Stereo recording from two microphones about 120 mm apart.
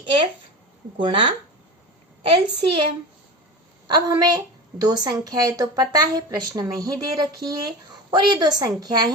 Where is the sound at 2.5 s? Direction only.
45° right (ahead or behind).